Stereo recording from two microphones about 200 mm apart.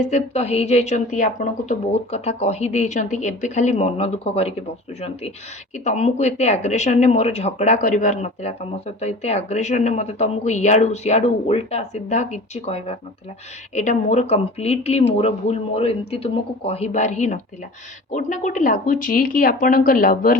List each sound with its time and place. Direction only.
0.0 s speech: 35° left (ahead or behind)